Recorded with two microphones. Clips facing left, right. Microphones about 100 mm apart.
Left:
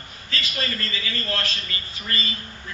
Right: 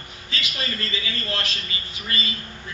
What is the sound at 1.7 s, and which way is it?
Speech, 45° left (ahead or behind).